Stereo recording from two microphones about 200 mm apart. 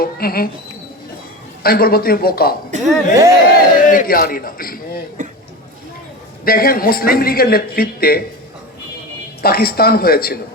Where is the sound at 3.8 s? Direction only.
40° left (ahead or behind).